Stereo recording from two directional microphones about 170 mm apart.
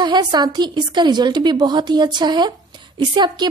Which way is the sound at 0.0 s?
25° right (ahead or behind).